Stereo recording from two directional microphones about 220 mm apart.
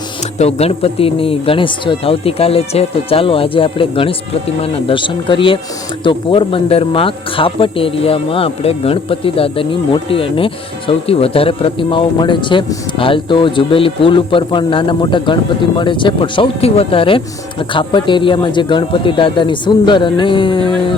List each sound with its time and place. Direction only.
0.3 s speech: 30° left (ahead or behind)